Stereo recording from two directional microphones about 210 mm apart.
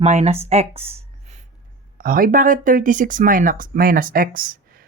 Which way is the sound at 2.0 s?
40° right (ahead or behind).